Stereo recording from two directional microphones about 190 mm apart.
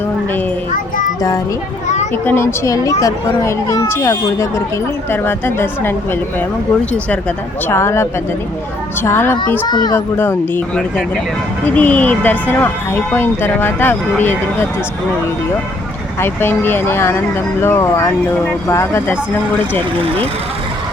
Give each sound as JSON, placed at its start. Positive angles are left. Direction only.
{"t": 2.2, "sound": "speech", "side_deg": 10}
{"t": 16.2, "sound": "speech", "side_deg": 10}